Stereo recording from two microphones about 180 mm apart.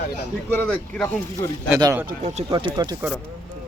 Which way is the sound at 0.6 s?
5° left (ahead or behind).